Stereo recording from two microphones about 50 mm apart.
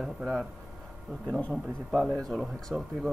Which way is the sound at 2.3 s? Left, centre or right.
Centre.